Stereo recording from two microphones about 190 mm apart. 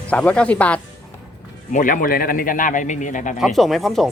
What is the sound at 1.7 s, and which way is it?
A man's voice, 45° left (ahead or behind).